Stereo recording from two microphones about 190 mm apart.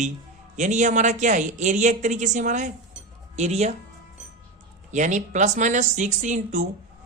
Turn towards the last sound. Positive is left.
turn(degrees=-40)  # may be behind; listen again after turning